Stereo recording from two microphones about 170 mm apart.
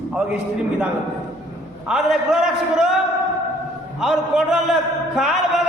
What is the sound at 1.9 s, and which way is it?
A man's voice, 5° right (ahead or behind).